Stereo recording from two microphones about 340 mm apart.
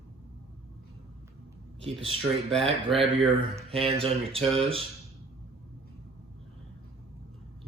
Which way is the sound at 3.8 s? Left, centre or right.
Centre.